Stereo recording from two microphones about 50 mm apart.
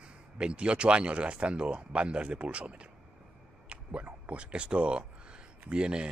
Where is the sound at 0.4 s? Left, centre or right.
Right.